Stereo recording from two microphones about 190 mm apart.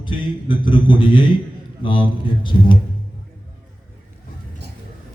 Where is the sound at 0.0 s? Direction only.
25° left (ahead or behind).